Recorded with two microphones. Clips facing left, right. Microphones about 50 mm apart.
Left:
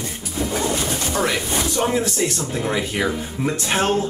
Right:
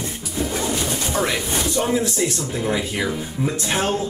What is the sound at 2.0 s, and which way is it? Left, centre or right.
Speech, left.